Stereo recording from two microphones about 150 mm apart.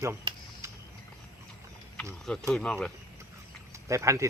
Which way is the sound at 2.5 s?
5° left (ahead or behind).